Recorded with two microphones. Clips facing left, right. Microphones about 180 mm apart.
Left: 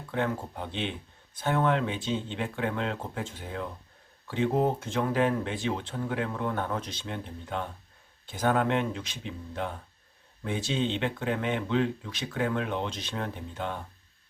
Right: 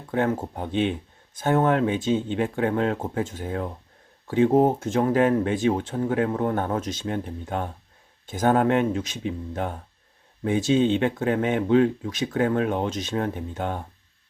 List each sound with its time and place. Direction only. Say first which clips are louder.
0.1 s speech: right 6 dB; 45° right (ahead or behind)